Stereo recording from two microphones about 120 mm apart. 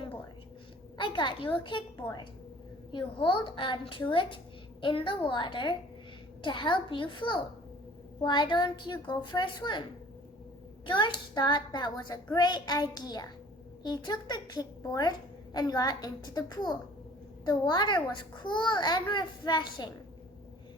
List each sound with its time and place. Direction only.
0.9 s a woman's voice: 45° left (ahead or behind)
10.8 s a child's voice: 40° left (ahead or behind)